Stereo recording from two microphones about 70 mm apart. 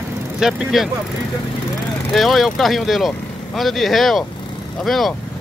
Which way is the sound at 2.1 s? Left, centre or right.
Centre.